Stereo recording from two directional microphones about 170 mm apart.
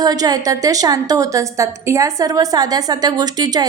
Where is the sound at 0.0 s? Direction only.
25° right (ahead or behind).